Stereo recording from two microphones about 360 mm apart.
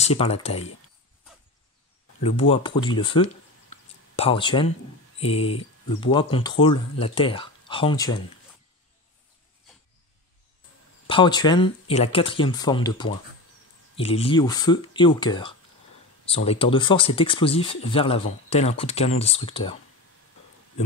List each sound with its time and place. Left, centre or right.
0.0 s speech: centre
2.2 s speech: centre
3.7 s a sound: centre
5.2 s speech: centre
11.1 s speech: centre